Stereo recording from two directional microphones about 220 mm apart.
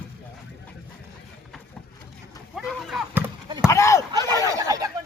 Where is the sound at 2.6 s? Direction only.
Centre (ahead or behind).